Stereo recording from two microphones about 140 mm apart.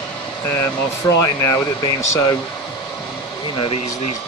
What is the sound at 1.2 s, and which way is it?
Speech, 20° left (ahead or behind).